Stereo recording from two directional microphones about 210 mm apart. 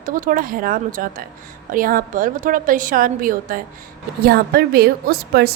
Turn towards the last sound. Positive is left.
turn(degrees=-45)  # may be behind; listen again after turning